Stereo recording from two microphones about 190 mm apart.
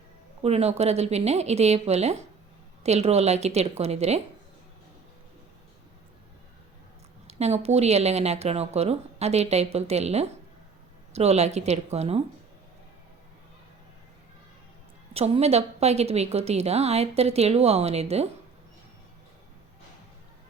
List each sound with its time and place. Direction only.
0.4 s a woman's voice: 35° right (ahead or behind)
7.3 s a woman's voice: 35° right (ahead or behind)
15.1 s a woman's voice: 30° right (ahead or behind)